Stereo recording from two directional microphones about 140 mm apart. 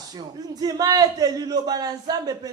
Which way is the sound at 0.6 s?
30° right (ahead or behind).